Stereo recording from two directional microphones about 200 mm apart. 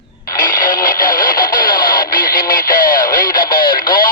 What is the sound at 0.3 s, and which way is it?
Radio, 45° left (ahead or behind).